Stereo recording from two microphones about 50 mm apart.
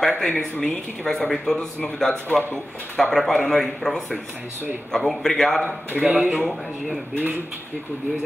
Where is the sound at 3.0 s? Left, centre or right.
Centre.